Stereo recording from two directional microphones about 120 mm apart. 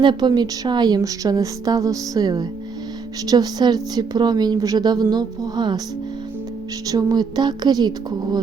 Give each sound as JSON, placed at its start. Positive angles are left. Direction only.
{"t": 0.0, "sound": "a woman's voice", "side_deg": -40}
{"t": 6.8, "sound": "a woman's voice", "side_deg": -30}